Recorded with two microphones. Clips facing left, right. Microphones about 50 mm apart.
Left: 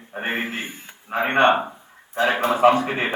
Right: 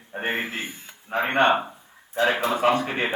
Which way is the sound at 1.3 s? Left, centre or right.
Left.